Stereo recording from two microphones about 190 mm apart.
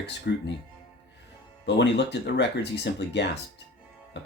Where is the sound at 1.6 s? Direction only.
65° left (ahead or behind).